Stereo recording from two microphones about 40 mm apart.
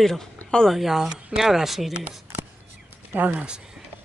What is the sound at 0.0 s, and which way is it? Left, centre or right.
Speech, centre.